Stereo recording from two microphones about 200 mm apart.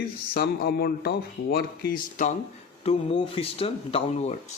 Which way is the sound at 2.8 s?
25° left (ahead or behind).